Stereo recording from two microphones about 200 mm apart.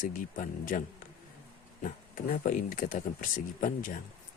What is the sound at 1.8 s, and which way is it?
Speech, 45° left (ahead or behind).